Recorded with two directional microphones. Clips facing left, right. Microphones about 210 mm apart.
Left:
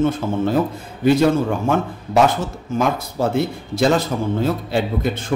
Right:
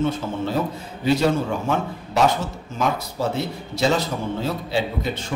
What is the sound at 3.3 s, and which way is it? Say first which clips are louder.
A man's voice: left 6 dB; 50° left (ahead or behind).